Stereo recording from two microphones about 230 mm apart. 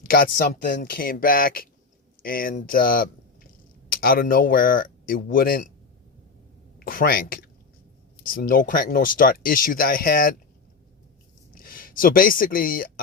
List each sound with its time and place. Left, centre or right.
0.0 s speech: left
6.7 s speech: left
11.5 s speech: left